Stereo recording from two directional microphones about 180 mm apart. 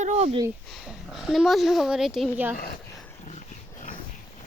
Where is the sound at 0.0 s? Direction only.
40° right (ahead or behind).